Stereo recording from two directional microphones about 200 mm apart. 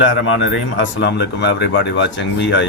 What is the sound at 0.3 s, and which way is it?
Speech, 70° left (ahead or behind).